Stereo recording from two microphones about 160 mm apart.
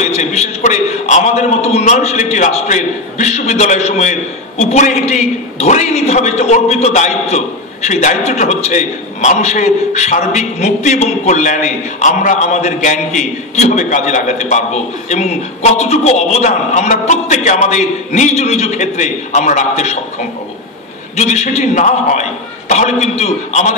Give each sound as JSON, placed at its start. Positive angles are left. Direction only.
{"t": 0.0, "sound": "a man's voice", "side_deg": 45}
{"t": 21.2, "sound": "a man's voice", "side_deg": 45}